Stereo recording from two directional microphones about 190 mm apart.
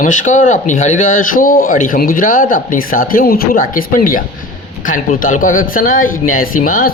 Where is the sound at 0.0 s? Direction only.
40° left (ahead or behind).